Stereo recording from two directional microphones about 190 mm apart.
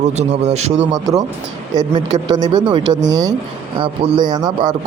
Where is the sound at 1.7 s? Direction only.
20° right (ahead or behind).